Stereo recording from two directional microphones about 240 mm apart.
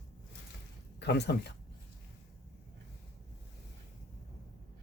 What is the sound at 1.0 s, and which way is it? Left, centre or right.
Speech, left.